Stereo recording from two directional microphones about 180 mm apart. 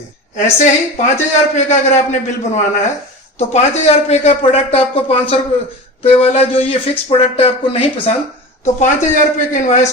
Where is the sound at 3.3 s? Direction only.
35° left (ahead or behind).